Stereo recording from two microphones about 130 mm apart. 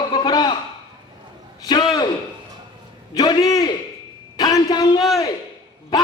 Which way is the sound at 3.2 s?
30° left (ahead or behind).